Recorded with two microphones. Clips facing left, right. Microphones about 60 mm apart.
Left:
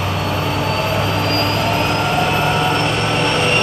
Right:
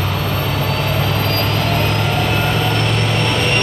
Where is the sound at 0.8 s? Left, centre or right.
Left.